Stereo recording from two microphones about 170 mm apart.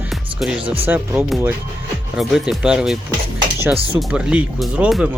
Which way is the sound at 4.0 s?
5° right (ahead or behind).